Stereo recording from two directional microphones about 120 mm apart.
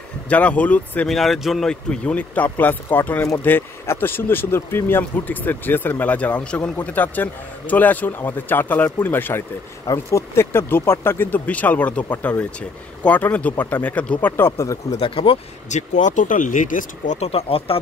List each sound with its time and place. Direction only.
0.3 s speech: 10° left (ahead or behind)
1.0 s speech: centre (ahead or behind); by 15.0 s 25° left (ahead or behind)
15.0 s speech: 50° left (ahead or behind)
15.7 s speech: 90° left
17.3 s speech: 55° left (ahead or behind)